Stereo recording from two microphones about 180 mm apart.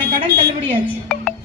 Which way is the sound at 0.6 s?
5° left (ahead or behind).